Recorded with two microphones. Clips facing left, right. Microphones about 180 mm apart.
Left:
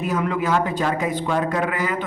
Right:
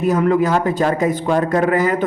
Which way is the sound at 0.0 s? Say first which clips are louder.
Right 7 dB; 45° right (ahead or behind).